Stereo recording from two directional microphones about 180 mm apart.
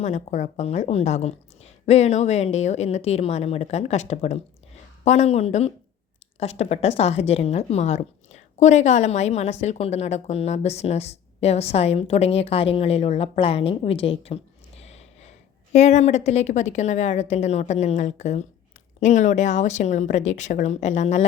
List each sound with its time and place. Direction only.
0.0 s a woman's voice: 40° left (ahead or behind)
14.8 s a sound: 35° left (ahead or behind)
15.7 s a woman's voice: 40° left (ahead or behind)